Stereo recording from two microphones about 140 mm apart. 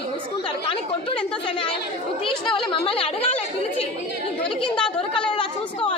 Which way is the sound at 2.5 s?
40° left (ahead or behind).